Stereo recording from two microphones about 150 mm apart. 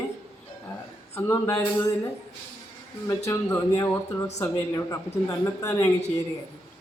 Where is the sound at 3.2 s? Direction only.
20° left (ahead or behind).